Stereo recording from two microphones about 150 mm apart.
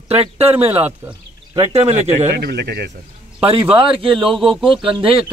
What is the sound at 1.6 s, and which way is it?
Speech, 45° right (ahead or behind).